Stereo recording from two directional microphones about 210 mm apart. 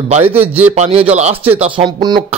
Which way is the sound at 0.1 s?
25° right (ahead or behind).